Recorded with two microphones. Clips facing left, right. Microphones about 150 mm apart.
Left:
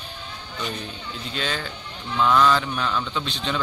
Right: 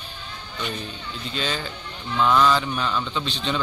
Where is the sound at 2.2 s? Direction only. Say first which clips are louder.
Even; 5° right (ahead or behind).